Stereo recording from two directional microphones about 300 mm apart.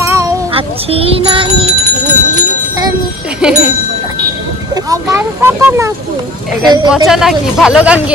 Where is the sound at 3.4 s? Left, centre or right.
Centre.